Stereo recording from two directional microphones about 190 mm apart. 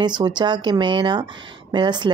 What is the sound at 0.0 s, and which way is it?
Speech, 25° right (ahead or behind).